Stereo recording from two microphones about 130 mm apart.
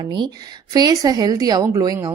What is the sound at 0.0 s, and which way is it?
A woman's voice, 35° right (ahead or behind).